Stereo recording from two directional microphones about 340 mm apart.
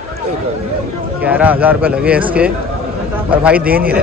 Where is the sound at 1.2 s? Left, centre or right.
Centre.